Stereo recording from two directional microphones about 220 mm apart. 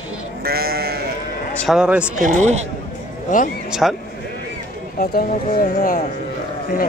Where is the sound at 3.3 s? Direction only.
35° left (ahead or behind).